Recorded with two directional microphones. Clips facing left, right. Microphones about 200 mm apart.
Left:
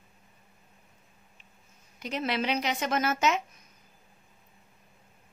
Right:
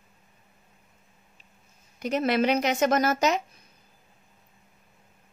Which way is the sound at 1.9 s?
45° right (ahead or behind).